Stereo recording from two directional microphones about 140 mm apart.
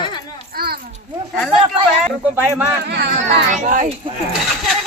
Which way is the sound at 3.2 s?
65° right (ahead or behind).